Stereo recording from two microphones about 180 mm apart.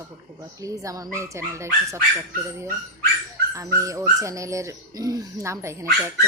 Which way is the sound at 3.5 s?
20° right (ahead or behind).